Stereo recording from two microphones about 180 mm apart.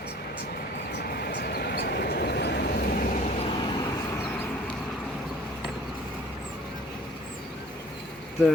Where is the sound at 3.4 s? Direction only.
30° left (ahead or behind).